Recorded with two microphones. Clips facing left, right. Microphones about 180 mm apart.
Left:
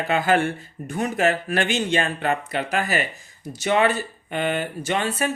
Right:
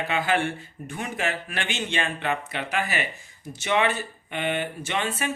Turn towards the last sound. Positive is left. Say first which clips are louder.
# left 5 dB
turn(degrees=40)  # may be behind; listen again after turning